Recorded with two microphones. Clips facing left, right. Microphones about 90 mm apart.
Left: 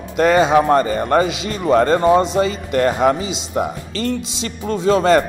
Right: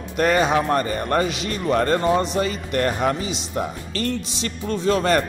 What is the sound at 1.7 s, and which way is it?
Speech, 20° left (ahead or behind).